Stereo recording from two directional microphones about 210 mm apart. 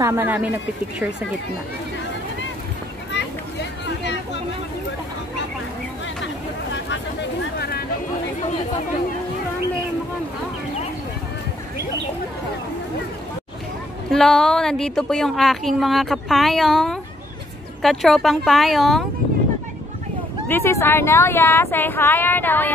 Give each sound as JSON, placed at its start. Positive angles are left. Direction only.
{"t": 0.0, "sound": "speech", "side_deg": -10}
{"t": 6.2, "sound": "a sound", "side_deg": 60}
{"t": 14.1, "sound": "speech", "side_deg": 0}
{"t": 20.4, "sound": "speech", "side_deg": 10}